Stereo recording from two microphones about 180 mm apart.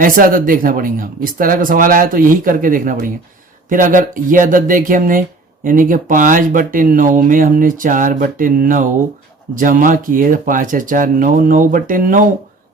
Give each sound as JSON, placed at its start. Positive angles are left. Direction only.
{"t": 0.0, "sound": "speech", "side_deg": -50}